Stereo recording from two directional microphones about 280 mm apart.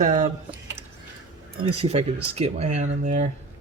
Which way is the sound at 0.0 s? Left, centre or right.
Right.